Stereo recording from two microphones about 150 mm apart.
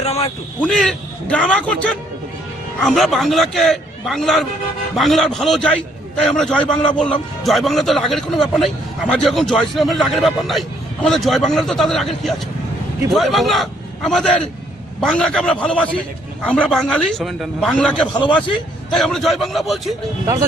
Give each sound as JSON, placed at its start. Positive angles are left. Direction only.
{"t": 0.0, "sound": "a sound", "side_deg": 45}
{"t": 0.6, "sound": "a man's voice", "side_deg": 5}
{"t": 18.1, "sound": "a man's voice", "side_deg": 30}
{"t": 18.9, "sound": "a man's voice", "side_deg": 0}